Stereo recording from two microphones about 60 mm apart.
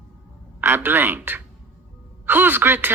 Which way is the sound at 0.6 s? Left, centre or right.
Right.